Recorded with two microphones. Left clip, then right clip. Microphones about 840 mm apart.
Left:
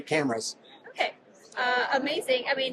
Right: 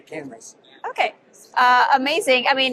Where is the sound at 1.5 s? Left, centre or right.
Right.